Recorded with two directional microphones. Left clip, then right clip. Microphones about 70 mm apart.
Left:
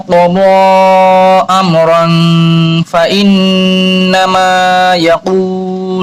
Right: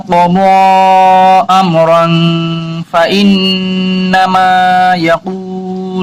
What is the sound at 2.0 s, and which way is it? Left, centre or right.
Mantra, left.